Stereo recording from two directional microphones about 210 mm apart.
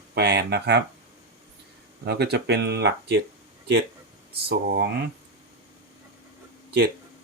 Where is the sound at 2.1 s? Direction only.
50° right (ahead or behind).